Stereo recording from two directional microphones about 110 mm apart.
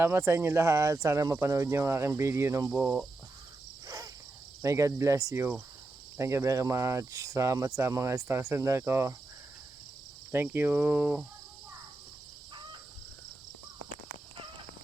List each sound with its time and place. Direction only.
0.0 s speech: 20° right (ahead or behind)
2.7 s speech: 10° right (ahead or behind)
3.8 s cricket: 30° right (ahead or behind)
4.6 s speech: 30° right (ahead or behind)
10.3 s speech: 20° right (ahead or behind)